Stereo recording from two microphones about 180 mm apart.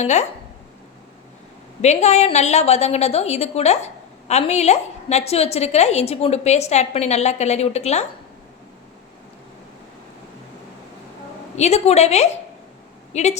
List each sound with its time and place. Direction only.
0.0 s a woman's voice: 40° left (ahead or behind)
1.8 s a woman's voice: 40° left (ahead or behind)
11.5 s a woman's voice: 35° left (ahead or behind)